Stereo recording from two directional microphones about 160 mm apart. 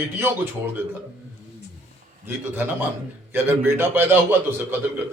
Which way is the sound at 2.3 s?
15° right (ahead or behind).